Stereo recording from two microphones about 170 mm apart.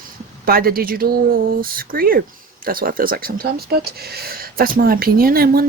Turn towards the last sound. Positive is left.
turn(degrees=-60)  # may be behind; listen again after turning